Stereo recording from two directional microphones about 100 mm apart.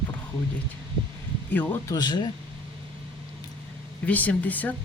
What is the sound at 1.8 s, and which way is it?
Speech, 45° left (ahead or behind).